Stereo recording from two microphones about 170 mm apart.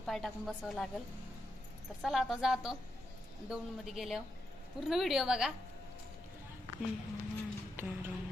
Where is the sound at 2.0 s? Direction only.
Centre (ahead or behind).